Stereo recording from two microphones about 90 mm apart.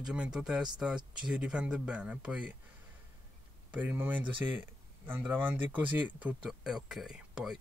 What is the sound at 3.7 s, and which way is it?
Speech, 20° right (ahead or behind).